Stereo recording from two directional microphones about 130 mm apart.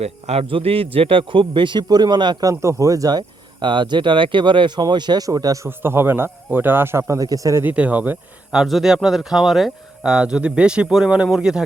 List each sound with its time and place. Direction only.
0.0 s a man's voice: 55° right (ahead or behind); by 5.6 s 30° right (ahead or behind)
5.6 s speech: 15° right (ahead or behind)
7.6 s speech: 10° right (ahead or behind)
8.6 s speech: centre (ahead or behind)